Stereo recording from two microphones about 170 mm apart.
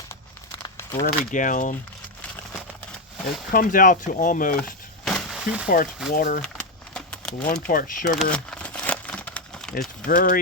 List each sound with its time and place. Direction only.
0.6 s crumpling: 15° left (ahead or behind)
1.0 s speech: 50° left (ahead or behind)
3.5 s speech: 55° left (ahead or behind)
5.0 s a sound: centre (ahead or behind)
5.6 s speech: 55° left (ahead or behind)
6.4 s a sound: 5° left (ahead or behind)
7.7 s speech: 55° left (ahead or behind)
8.1 s crumpling: centre (ahead or behind)
10.1 s speech: 55° left (ahead or behind)